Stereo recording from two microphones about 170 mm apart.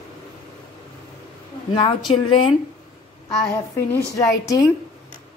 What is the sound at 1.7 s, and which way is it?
Speech, 30° left (ahead or behind).